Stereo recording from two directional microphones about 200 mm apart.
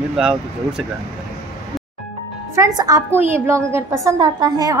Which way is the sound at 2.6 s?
20° right (ahead or behind).